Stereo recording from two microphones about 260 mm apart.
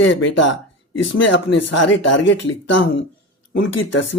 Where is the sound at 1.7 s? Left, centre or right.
Left.